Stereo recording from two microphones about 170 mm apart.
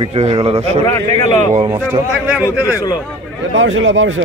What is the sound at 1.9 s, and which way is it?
Speech, 10° right (ahead or behind).